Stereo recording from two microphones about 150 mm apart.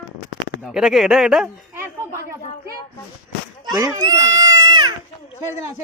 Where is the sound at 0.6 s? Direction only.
Centre (ahead or behind).